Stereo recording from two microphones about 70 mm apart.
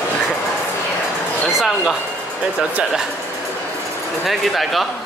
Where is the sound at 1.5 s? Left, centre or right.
Centre.